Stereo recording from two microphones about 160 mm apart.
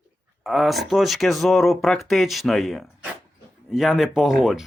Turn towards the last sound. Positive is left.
turn(degrees=0)  # may be behind; listen again after turning